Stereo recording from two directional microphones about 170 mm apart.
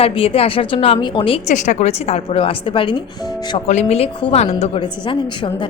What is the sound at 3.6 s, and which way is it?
A woman's voice, 40° left (ahead or behind).